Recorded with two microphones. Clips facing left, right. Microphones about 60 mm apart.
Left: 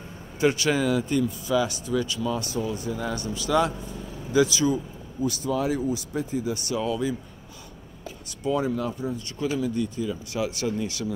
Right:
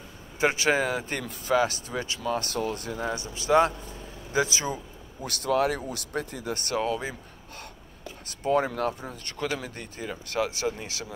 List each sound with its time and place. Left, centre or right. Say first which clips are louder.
0.4 s speech: left 1 dB; right
3.0 s speech: left 2 dB; right
5.2 s speech: right 1 dB; right
8.5 s speech: right 1 dB; right
10.6 s speech: left 3 dB; right